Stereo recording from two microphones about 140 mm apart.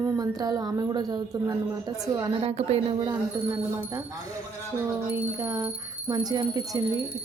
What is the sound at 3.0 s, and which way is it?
A woman's voice, 25° right (ahead or behind).